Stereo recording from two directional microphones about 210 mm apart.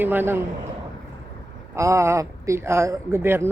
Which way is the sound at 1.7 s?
15° right (ahead or behind).